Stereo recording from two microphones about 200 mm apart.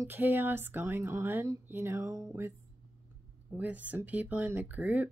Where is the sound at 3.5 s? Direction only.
10° right (ahead or behind).